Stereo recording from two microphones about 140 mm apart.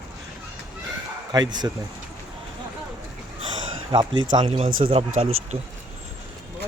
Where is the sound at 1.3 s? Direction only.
30° right (ahead or behind).